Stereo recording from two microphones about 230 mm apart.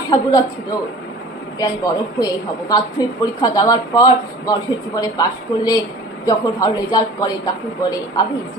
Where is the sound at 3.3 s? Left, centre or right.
Centre.